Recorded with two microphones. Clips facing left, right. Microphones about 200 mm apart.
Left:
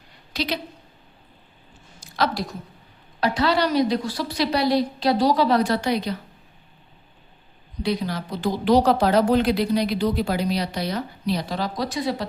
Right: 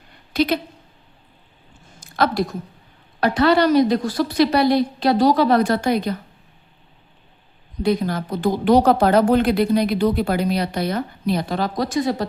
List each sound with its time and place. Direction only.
0.3 s a woman's voice: 55° right (ahead or behind)
2.0 s a sound: 55° right (ahead or behind)
3.2 s speech: 55° right (ahead or behind)
7.8 s speech: 50° right (ahead or behind)